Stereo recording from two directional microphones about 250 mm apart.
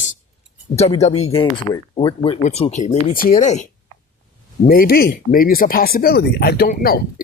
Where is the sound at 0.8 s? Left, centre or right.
Left.